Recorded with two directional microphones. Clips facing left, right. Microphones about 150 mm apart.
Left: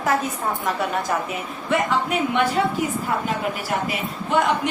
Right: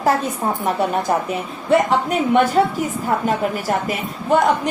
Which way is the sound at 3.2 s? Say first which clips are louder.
Right 5 dB; 45° right (ahead or behind).